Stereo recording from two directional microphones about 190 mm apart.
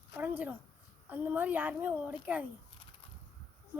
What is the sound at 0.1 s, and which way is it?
A woman's voice, 10° right (ahead or behind).